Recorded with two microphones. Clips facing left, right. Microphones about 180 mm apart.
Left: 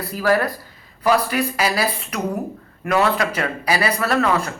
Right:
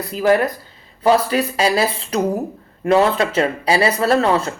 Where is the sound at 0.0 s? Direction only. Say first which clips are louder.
Right 3 dB; 20° right (ahead or behind).